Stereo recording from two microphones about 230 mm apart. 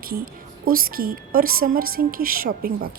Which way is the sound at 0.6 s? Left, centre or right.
Right.